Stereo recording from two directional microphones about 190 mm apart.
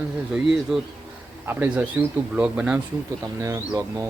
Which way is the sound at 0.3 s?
Centre (ahead or behind).